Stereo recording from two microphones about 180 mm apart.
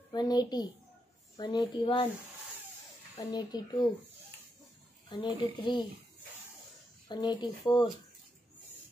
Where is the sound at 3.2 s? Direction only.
20° left (ahead or behind).